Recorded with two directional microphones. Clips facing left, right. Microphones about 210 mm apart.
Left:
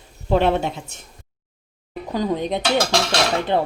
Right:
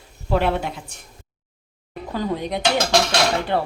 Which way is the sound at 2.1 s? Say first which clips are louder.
Left 3 dB; 20° left (ahead or behind).